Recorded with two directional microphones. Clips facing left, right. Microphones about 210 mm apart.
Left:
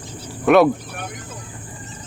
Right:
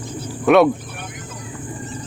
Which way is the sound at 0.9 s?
50° left (ahead or behind).